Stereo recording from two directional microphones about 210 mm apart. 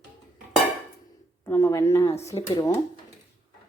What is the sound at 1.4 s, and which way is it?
Speech, 10° left (ahead or behind).